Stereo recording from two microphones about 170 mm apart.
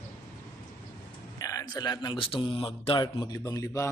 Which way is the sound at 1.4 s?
20° left (ahead or behind).